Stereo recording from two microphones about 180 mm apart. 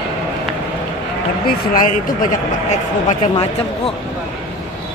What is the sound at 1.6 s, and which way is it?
Speech, 50° left (ahead or behind).